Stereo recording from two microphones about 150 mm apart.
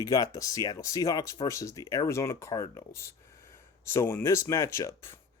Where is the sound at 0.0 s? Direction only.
25° left (ahead or behind).